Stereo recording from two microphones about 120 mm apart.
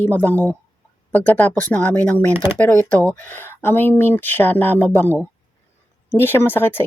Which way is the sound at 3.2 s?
15° left (ahead or behind).